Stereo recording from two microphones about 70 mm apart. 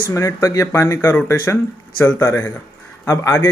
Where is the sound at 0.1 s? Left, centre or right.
Left.